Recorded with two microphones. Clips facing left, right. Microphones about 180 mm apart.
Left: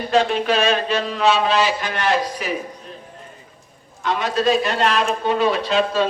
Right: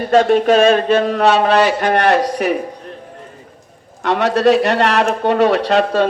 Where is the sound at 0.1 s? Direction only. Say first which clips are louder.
Right 7 dB; 50° right (ahead or behind).